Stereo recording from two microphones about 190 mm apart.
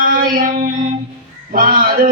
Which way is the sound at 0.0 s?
50° right (ahead or behind).